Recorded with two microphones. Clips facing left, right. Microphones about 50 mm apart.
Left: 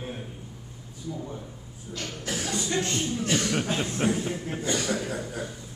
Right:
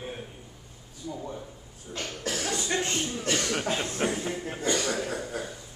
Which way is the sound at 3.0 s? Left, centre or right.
Centre.